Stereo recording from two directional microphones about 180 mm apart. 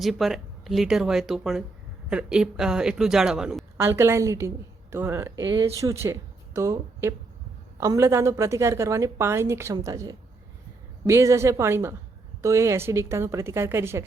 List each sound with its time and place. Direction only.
0.0 s speech: centre (ahead or behind)
3.8 s a woman's voice: 15° right (ahead or behind)
5.4 s speech: 90° right
5.8 s a woman's voice: 15° right (ahead or behind)